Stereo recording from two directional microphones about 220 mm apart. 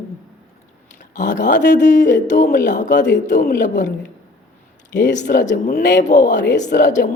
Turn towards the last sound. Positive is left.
turn(degrees=35)  # may be behind; listen again after turning